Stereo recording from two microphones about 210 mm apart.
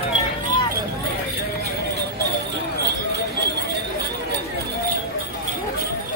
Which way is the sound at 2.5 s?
55° right (ahead or behind).